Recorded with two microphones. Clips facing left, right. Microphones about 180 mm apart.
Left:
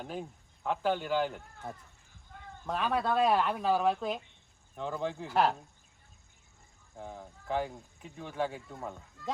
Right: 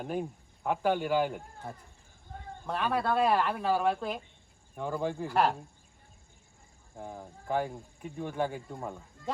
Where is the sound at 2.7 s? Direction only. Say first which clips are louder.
Right 1 dB; centre (ahead or behind).